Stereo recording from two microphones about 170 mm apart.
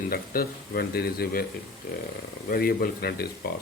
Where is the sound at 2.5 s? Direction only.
60° left (ahead or behind).